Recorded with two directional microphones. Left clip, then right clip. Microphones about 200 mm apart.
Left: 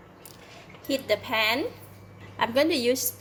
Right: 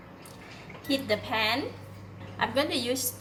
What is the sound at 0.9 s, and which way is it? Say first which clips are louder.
A woman's voice: left 2 dB; 45° left (ahead or behind).